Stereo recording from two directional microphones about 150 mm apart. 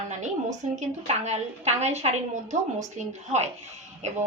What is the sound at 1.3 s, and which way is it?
A woman's voice, 45° right (ahead or behind).